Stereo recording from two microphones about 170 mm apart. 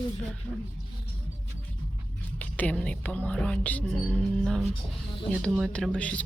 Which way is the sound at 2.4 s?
10° left (ahead or behind).